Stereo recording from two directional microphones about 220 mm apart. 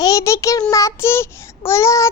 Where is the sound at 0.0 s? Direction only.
15° left (ahead or behind).